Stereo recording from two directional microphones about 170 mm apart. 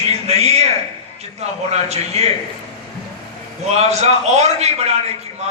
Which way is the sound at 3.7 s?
40° right (ahead or behind).